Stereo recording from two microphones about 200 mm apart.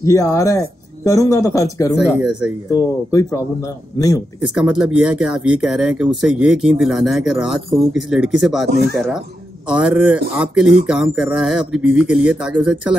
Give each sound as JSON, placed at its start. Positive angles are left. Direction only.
{"t": 0.0, "sound": "speech", "side_deg": 15}
{"t": 2.1, "sound": "speech", "side_deg": -5}
{"t": 2.7, "sound": "speech", "side_deg": 15}
{"t": 4.4, "sound": "speech", "side_deg": -5}
{"t": 8.6, "sound": "speech", "side_deg": -55}
{"t": 9.7, "sound": "speech", "side_deg": -5}